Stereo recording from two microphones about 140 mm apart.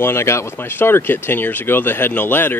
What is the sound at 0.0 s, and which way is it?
Speech, 20° left (ahead or behind).